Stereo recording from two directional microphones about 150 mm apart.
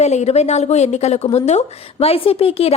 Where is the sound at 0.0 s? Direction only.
50° left (ahead or behind).